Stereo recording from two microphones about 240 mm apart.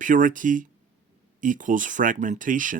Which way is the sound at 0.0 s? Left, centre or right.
Right.